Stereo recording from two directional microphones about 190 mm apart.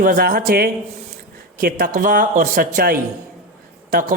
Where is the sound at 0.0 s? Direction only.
50° right (ahead or behind).